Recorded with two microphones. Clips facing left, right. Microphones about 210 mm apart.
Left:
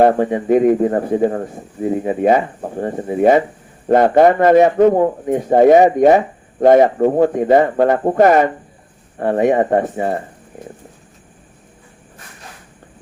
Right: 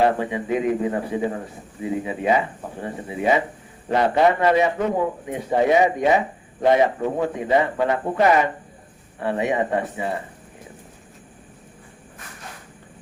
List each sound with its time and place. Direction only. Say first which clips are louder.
0.0 s a man's voice: left 7 dB; 50° left (ahead or behind)